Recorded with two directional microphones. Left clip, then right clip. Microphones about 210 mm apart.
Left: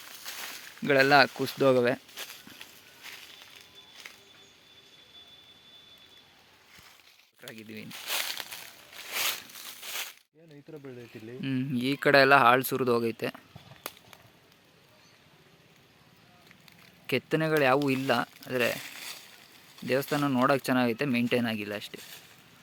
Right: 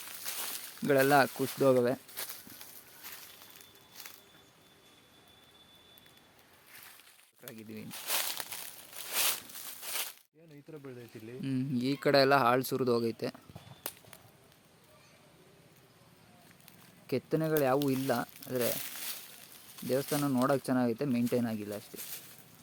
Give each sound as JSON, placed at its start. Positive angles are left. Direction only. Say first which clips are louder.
{"t": 0.3, "sound": "speech", "louder": "left 2 dB", "side_deg": 0}
{"t": 2.1, "sound": "a sound", "louder": "left 3 dB", "side_deg": 25}
{"t": 7.4, "sound": "a sound", "louder": "left 4 dB", "side_deg": 0}
{"t": 10.7, "sound": "speech", "louder": "left 3 dB", "side_deg": 35}
{"t": 11.3, "sound": "speech", "louder": "left 3 dB", "side_deg": 0}
{"t": 17.1, "sound": "speech", "louder": "left 4 dB", "side_deg": 0}
{"t": 20.7, "sound": "speech", "louder": "left 4 dB", "side_deg": 0}